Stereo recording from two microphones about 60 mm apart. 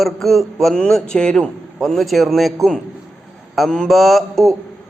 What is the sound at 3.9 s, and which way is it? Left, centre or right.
Speech, centre.